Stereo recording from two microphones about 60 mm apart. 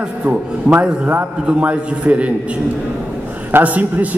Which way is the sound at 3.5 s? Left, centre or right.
Right.